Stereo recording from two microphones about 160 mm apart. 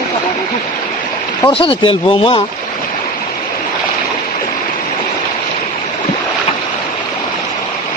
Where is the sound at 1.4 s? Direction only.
35° left (ahead or behind).